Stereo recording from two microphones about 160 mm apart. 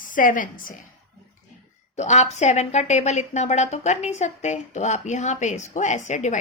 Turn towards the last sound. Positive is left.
turn(degrees=50)  # may be behind; listen again after turning